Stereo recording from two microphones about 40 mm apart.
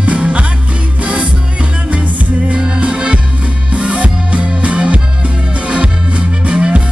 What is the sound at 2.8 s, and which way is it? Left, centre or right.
Music, right.